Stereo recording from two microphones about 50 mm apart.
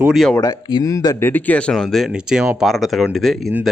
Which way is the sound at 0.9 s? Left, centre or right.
Left.